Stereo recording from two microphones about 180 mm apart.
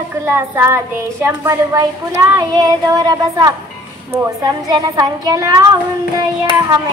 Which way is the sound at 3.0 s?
20° right (ahead or behind).